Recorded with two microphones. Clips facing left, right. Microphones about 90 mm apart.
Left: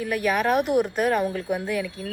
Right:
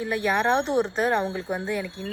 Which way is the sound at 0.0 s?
25° right (ahead or behind).